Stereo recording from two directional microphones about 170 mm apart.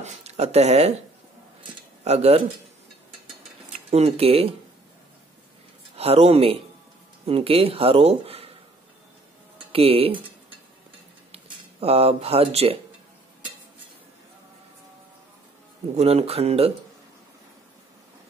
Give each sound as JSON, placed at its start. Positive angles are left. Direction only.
{"t": 0.0, "sound": "speech", "side_deg": -40}
{"t": 2.0, "sound": "speech", "side_deg": -35}
{"t": 3.9, "sound": "speech", "side_deg": -35}
{"t": 5.9, "sound": "speech", "side_deg": -35}
{"t": 9.7, "sound": "speech", "side_deg": -35}
{"t": 11.3, "sound": "speech", "side_deg": -35}
{"t": 16.0, "sound": "speech", "side_deg": -35}